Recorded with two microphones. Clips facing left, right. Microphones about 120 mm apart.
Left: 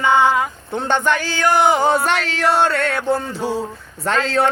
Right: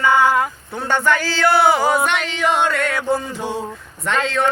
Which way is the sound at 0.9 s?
20° left (ahead or behind).